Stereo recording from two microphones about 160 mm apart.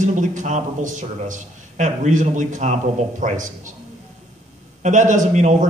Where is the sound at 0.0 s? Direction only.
50° right (ahead or behind).